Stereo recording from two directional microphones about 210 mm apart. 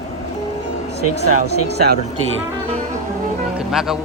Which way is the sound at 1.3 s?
50° right (ahead or behind).